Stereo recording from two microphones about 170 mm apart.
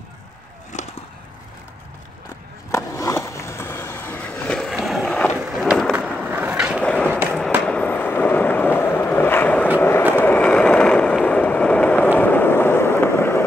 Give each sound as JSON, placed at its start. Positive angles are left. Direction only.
{"t": 0.7, "sound": "a sound", "side_deg": 45}
{"t": 2.7, "sound": "skateboard", "side_deg": 20}
{"t": 5.4, "sound": "run", "side_deg": -5}
{"t": 6.2, "sound": "skateboard", "side_deg": -10}
{"t": 6.8, "sound": "skateboard", "side_deg": 5}
{"t": 7.3, "sound": "fireworks", "side_deg": 5}
{"t": 9.8, "sound": "vehicle", "side_deg": 15}
{"t": 10.1, "sound": "a sound", "side_deg": 10}
{"t": 12.2, "sound": "fireworks", "side_deg": 10}